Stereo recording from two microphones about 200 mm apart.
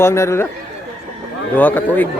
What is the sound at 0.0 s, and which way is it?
Speech, 15° left (ahead or behind).